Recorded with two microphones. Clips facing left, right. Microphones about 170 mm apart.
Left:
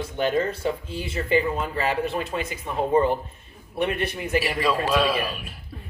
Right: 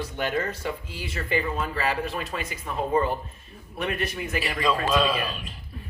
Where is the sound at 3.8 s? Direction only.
30° left (ahead or behind).